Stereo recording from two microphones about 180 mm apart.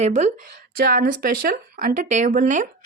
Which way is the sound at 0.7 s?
55° right (ahead or behind).